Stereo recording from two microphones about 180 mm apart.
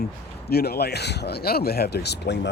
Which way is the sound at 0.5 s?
60° left (ahead or behind).